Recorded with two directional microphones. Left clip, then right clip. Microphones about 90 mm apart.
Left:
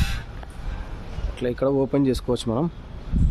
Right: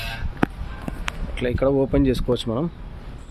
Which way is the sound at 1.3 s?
Centre (ahead or behind).